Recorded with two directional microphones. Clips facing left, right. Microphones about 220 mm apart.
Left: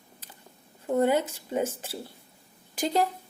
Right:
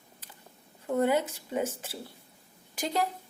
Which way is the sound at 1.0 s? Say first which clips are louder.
Left 2 dB; 30° left (ahead or behind).